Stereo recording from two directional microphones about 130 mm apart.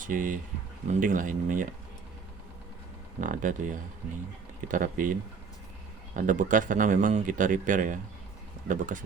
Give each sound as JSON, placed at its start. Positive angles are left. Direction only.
{"t": 0.0, "sound": "speech", "side_deg": -90}
{"t": 3.2, "sound": "speech", "side_deg": -85}
{"t": 6.1, "sound": "speech", "side_deg": -80}